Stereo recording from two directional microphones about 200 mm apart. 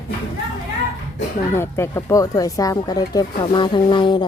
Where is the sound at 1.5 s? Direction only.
15° left (ahead or behind).